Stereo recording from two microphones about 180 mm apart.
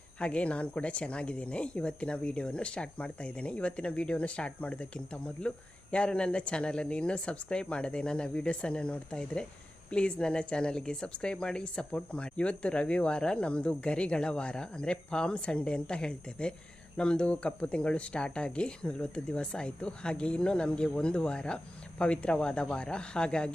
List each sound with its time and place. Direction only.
0.2 s speech: 5° left (ahead or behind)